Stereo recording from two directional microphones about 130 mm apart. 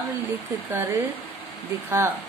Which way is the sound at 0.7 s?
20° right (ahead or behind).